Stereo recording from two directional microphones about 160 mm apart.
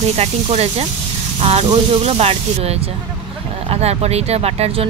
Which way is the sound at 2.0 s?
40° right (ahead or behind).